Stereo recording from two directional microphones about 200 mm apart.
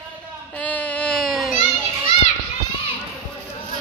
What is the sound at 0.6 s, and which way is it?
Baby cry, 5° left (ahead or behind).